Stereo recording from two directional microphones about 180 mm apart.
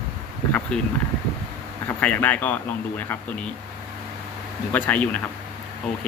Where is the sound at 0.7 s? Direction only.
5° left (ahead or behind).